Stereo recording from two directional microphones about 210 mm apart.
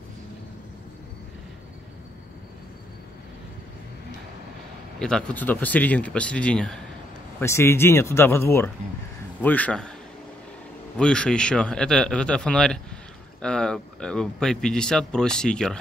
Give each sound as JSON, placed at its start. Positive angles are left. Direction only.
{"t": 4.9, "sound": "speech", "side_deg": 5}
{"t": 11.0, "sound": "speech", "side_deg": 5}